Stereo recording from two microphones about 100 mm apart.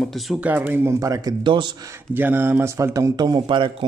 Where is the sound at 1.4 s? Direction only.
50° right (ahead or behind).